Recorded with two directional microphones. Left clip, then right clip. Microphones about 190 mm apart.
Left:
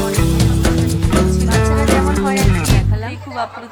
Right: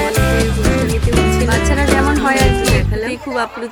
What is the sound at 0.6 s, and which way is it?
Music, centre (ahead or behind).